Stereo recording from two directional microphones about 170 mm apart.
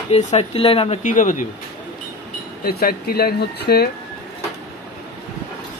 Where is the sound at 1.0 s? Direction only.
50° left (ahead or behind).